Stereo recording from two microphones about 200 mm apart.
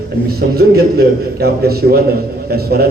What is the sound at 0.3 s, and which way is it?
A man's voice, 50° right (ahead or behind).